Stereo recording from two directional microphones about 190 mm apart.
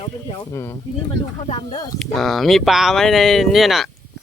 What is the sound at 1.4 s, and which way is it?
Speech, 35° left (ahead or behind).